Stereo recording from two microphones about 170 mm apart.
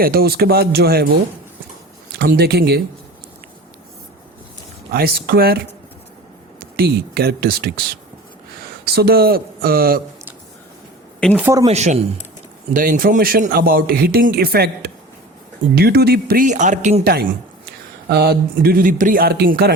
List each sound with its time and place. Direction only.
0.0 s speech: 65° right (ahead or behind)
2.1 s speech: 70° right (ahead or behind)
4.9 s speech: 65° right (ahead or behind)
6.6 s speech: 70° right (ahead or behind)
11.3 s speech: 15° right (ahead or behind)
11.7 s speech: 40° right (ahead or behind)
12.7 s speech: 55° right (ahead or behind)
17.0 s a man's voice: 65° right (ahead or behind)